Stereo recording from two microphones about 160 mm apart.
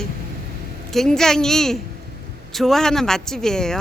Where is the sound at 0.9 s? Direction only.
5° left (ahead or behind).